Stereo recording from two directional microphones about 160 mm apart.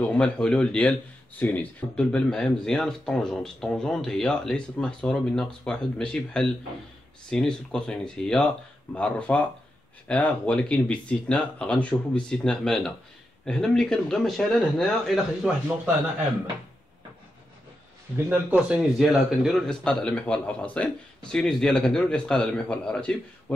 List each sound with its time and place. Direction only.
0.0 s speech: 5° left (ahead or behind)
18.1 s speech: 10° right (ahead or behind); by 23.1 s 5° left (ahead or behind)